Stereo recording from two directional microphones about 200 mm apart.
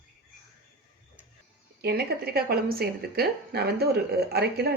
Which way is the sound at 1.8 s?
50° right (ahead or behind).